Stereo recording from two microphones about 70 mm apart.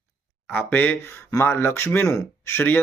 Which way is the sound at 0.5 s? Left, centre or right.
Left.